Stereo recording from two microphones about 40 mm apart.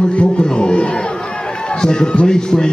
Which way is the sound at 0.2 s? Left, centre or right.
Left.